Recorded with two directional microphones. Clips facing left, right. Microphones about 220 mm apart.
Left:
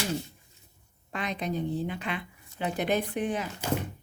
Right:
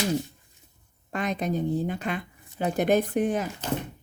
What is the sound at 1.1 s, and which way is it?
Speech, 45° right (ahead or behind).